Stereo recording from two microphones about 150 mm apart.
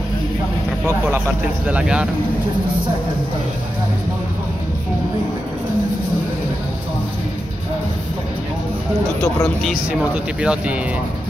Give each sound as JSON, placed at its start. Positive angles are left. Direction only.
{"t": 0.8, "sound": "speech", "side_deg": -15}
{"t": 10.4, "sound": "speech", "side_deg": -5}